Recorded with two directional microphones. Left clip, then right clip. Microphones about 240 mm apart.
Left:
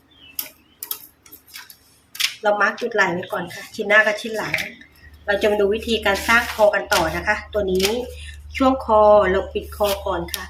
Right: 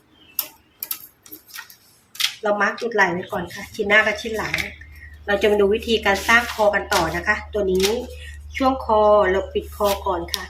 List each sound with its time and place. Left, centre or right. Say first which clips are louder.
2.1 s speech: left 2 dB; centre